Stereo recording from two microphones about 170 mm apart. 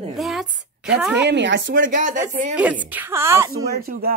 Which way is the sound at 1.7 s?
50° right (ahead or behind).